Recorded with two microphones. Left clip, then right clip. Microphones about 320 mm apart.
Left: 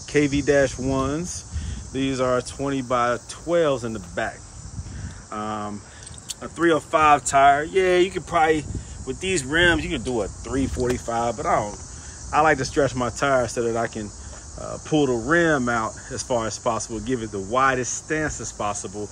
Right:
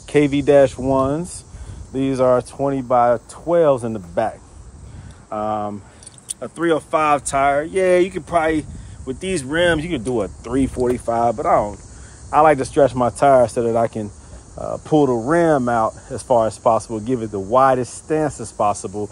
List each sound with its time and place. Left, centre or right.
0.1 s speech: centre
14.9 s speech: right
15.2 s speech: centre